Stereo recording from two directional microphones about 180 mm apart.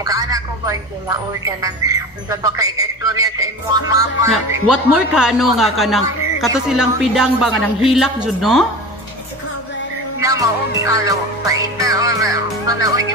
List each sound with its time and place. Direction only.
0.0 s speech: 20° right (ahead or behind)
3.9 s music: 20° right (ahead or behind)
4.5 s a man's voice: 5° right (ahead or behind)
10.2 s music: 20° right (ahead or behind)